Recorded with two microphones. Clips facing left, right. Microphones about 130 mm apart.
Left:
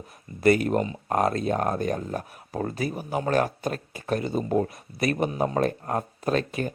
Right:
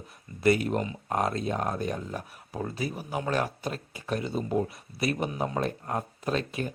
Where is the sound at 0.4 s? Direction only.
50° left (ahead or behind).